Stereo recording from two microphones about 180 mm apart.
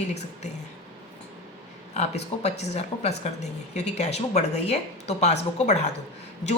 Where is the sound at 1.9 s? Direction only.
40° left (ahead or behind).